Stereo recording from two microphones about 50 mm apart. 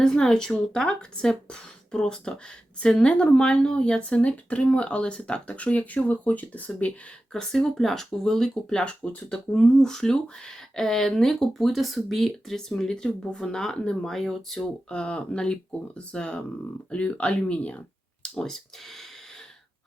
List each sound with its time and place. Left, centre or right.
0.0 s speech: centre; by 6.7 s left
7.3 s speech: centre
14.8 s speech: centre
18.4 s speech: centre